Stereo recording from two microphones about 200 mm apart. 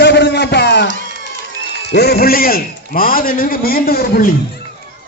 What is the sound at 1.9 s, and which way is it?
A man's voice, 55° left (ahead or behind).